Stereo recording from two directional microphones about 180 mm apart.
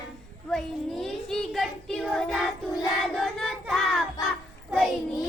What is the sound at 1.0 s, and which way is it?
Child singing, centre (ahead or behind).